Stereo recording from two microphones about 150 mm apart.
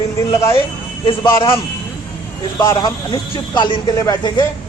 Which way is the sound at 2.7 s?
30° left (ahead or behind).